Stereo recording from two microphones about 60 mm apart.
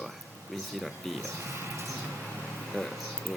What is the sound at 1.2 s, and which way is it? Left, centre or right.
Mouse, right.